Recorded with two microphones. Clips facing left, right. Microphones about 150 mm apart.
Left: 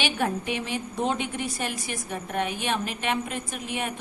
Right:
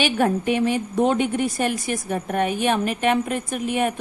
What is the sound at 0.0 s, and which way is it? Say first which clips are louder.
A woman's voice: right 7 dB; 50° right (ahead or behind).